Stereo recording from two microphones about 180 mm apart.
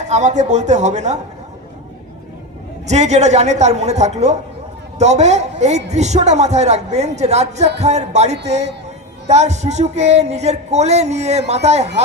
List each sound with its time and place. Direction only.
0.0 s a man's voice: 40° right (ahead or behind)
2.8 s a man's voice: 40° right (ahead or behind)